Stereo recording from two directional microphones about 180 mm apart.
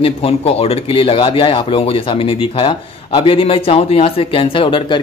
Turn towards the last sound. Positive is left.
turn(degrees=25)  # may be behind; listen again after turning